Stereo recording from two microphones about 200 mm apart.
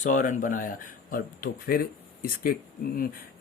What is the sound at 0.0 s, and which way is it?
Speech, 40° left (ahead or behind).